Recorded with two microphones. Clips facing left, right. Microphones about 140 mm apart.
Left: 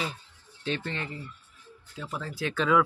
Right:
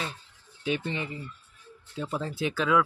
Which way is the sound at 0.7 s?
10° right (ahead or behind).